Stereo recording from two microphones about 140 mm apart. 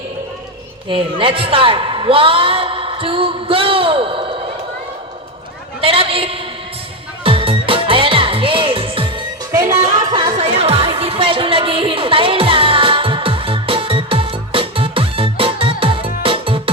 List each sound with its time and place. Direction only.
0.9 s a man's voice: 40° right (ahead or behind)
5.8 s a sound: 40° right (ahead or behind)
7.3 s music: 40° right (ahead or behind)
9.5 s music: 20° right (ahead or behind)
10.1 s music: 35° right (ahead or behind)